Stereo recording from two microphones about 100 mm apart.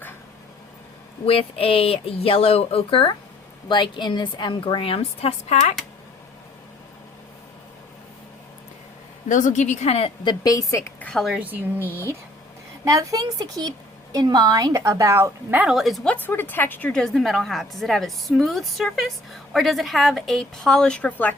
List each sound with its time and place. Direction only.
1.2 s speech: 75° left (ahead or behind)
3.7 s a woman's voice: 50° left (ahead or behind)
4.8 s speech: 70° left (ahead or behind)
9.8 s a woman's voice: 90° left
10.4 s speech: 35° left (ahead or behind)
11.0 s a woman's voice: 5° left (ahead or behind)
11.3 s speech: 15° right (ahead or behind)
12.8 s a woman's voice: 35° right (ahead or behind)
15.7 s a woman's voice: centre (ahead or behind)
16.0 s speech: 20° left (ahead or behind)
16.9 s a woman's voice: 5° left (ahead or behind)